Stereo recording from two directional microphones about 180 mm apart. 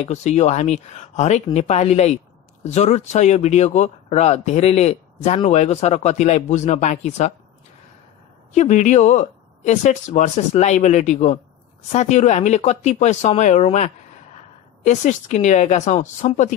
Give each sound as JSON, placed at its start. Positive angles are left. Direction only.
{"t": 0.0, "sound": "speech", "side_deg": 40}
{"t": 8.5, "sound": "speech", "side_deg": 40}